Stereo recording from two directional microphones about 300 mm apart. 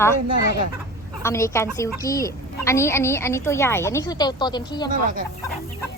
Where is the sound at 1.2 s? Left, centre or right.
Centre.